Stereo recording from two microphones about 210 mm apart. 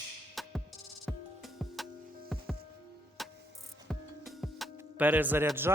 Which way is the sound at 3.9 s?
Centre (ahead or behind).